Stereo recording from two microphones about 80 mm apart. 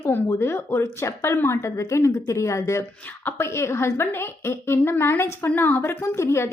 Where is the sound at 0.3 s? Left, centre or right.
Left.